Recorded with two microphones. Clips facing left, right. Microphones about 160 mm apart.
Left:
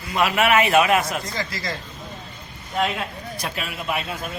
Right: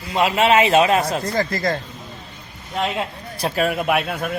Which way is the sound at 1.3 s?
50° right (ahead or behind).